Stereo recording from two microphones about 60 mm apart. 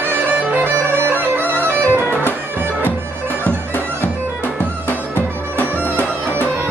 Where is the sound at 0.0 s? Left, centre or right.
Right.